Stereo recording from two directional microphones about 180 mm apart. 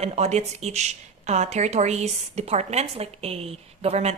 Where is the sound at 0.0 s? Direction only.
35° right (ahead or behind).